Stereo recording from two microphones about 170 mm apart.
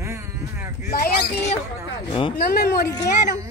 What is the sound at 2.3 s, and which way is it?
Speech, 65° left (ahead or behind).